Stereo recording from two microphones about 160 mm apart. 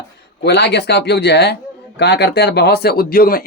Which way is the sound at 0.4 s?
90° left.